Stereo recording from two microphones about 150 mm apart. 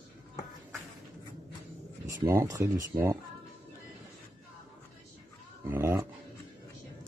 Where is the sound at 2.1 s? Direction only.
20° right (ahead or behind).